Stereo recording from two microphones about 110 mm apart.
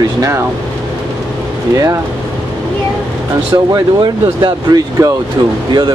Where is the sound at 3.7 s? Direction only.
40° right (ahead or behind).